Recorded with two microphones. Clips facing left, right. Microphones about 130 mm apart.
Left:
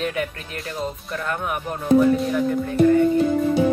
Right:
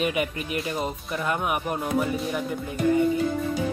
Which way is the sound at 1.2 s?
15° right (ahead or behind).